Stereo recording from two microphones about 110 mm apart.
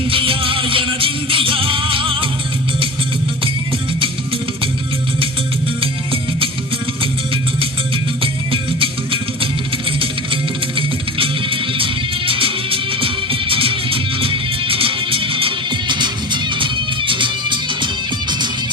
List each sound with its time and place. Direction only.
0.1 s music: 55° right (ahead or behind)
8.2 s music: 55° right (ahead or behind)